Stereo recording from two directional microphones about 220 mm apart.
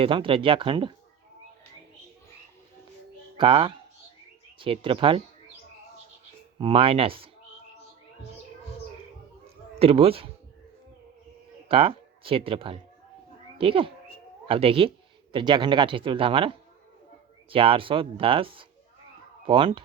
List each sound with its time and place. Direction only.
0.0 s speech: 25° right (ahead or behind)
3.3 s speech: 25° right (ahead or behind)
6.6 s speech: 25° right (ahead or behind)
9.7 s speech: 25° right (ahead or behind)
11.7 s speech: 25° right (ahead or behind)